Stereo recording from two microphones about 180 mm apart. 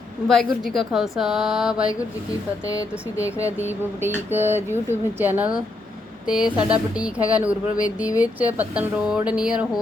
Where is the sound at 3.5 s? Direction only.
10° right (ahead or behind).